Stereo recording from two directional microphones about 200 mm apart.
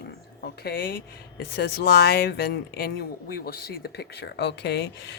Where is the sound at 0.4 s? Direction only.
50° left (ahead or behind).